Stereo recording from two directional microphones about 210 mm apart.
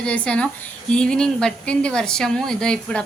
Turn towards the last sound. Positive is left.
turn(degrees=5)  # may be behind; listen again after turning